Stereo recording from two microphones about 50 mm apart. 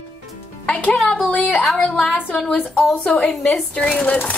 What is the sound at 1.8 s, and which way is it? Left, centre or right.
A woman's voice, left.